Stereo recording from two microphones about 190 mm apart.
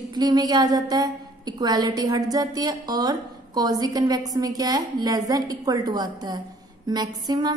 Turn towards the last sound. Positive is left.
turn(degrees=-20)  # may be behind; listen again after turning